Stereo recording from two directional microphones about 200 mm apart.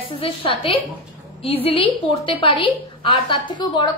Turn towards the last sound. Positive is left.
turn(degrees=25)  # may be behind; listen again after turning